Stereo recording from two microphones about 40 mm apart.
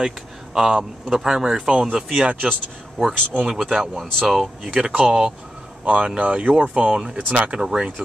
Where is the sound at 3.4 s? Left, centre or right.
Centre.